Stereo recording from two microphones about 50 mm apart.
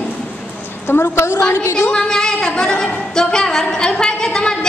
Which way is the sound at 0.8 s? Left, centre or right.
Left.